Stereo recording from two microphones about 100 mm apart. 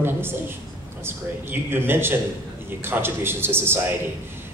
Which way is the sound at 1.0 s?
20° right (ahead or behind).